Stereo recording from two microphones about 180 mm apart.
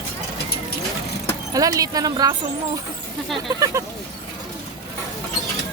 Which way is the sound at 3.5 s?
20° right (ahead or behind).